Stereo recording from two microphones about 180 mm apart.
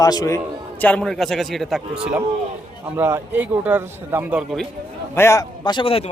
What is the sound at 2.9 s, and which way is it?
A man's voice, 10° right (ahead or behind).